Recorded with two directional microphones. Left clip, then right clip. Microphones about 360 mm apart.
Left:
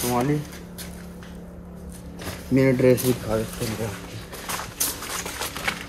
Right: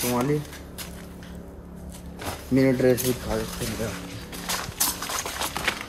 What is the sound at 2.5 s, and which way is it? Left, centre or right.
Speech, centre.